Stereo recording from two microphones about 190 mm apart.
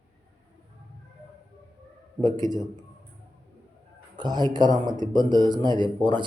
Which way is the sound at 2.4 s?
Centre (ahead or behind).